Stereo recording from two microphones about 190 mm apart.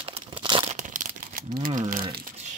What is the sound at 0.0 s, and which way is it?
Crumpling, 30° right (ahead or behind).